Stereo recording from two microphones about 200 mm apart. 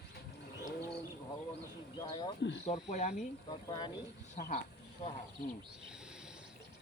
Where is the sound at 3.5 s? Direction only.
20° left (ahead or behind).